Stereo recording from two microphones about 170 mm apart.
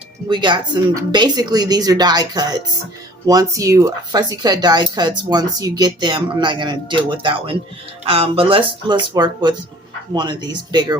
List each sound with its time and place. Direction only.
0.3 s speech: 25° right (ahead or behind)